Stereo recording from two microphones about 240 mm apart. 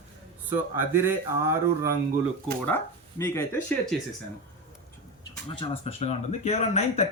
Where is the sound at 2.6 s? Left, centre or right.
Centre.